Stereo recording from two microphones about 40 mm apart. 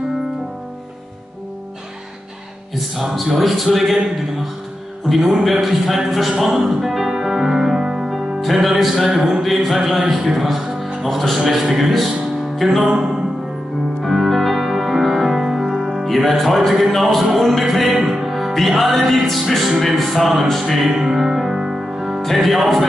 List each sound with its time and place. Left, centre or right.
2.7 s music: centre
5.1 s music: centre
8.1 s music: centre
12.9 s music: centre
14.0 s music: centre
20.8 s music: centre